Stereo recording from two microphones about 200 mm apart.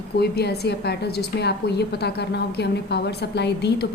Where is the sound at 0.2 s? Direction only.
55° left (ahead or behind).